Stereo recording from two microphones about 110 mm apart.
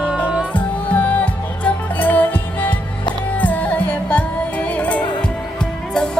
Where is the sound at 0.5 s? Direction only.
15° left (ahead or behind).